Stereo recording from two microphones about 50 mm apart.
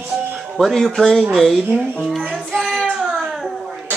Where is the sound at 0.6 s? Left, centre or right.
Centre.